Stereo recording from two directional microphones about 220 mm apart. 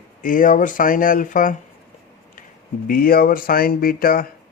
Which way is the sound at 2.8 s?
40° left (ahead or behind).